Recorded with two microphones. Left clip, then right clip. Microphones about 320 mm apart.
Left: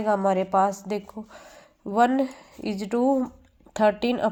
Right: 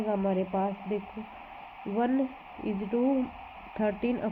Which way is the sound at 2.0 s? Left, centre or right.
Left.